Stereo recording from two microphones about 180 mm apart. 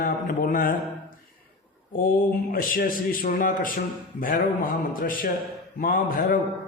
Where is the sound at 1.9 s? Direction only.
50° left (ahead or behind).